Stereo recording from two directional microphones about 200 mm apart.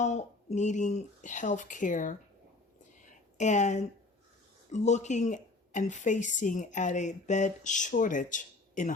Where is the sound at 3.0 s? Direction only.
35° left (ahead or behind).